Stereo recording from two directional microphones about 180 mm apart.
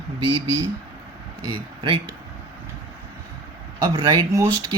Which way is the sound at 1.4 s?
25° right (ahead or behind).